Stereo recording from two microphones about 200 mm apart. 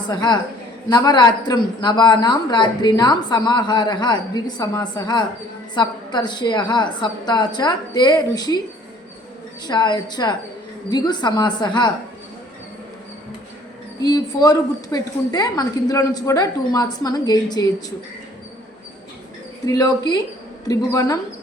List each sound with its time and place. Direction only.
0.0 s speech: 20° left (ahead or behind)
9.6 s speech: 20° left (ahead or behind)
14.0 s speech: 20° left (ahead or behind)
19.6 s speech: 15° left (ahead or behind)